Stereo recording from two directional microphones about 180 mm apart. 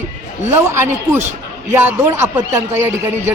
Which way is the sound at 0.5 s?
15° right (ahead or behind).